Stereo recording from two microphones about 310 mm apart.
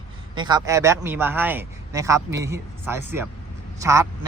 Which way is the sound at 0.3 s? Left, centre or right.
Centre.